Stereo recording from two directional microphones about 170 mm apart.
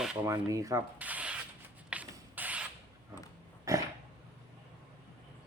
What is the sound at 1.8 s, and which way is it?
Sanding, 10° right (ahead or behind).